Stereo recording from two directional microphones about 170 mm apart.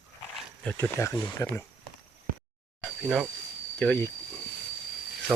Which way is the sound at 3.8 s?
10° left (ahead or behind).